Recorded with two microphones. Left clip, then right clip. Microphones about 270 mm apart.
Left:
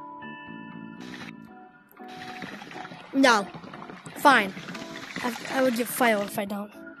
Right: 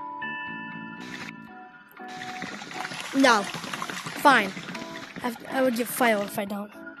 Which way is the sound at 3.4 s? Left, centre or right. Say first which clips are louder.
Right 8 dB; right.